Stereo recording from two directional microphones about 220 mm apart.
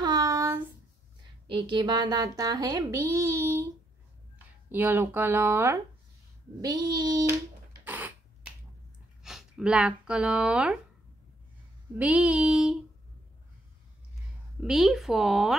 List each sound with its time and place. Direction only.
0.0 s a sound: 20° right (ahead or behind)
1.5 s speech: 20° right (ahead or behind)
7.8 s a sound: 10° right (ahead or behind)
9.2 s speech: centre (ahead or behind)
12.0 s speech: 5° right (ahead or behind)
14.6 s speech: centre (ahead or behind)